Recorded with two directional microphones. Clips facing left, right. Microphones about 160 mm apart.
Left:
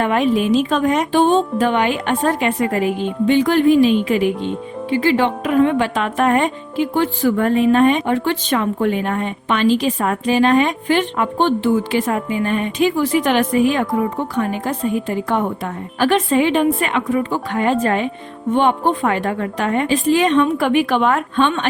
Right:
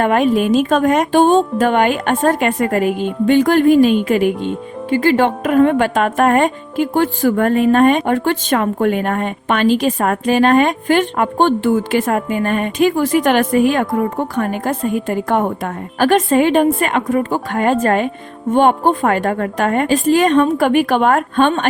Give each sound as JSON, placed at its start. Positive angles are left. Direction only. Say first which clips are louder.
{"t": 0.0, "sound": "speech", "louder": "right 3 dB", "side_deg": -50}